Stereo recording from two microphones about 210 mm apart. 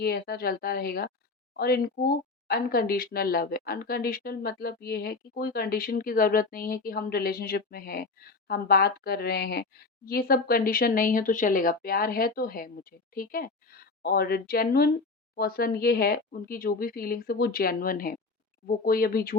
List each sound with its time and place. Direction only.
0.0 s speech: 50° left (ahead or behind)